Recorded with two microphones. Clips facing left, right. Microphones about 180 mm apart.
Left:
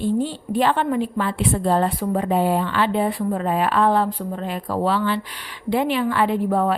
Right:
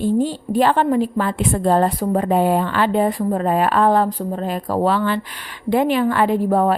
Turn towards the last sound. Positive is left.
turn(degrees=-40)  # may be behind; listen again after turning